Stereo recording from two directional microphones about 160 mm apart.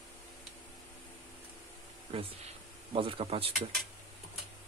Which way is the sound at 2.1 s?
35° right (ahead or behind).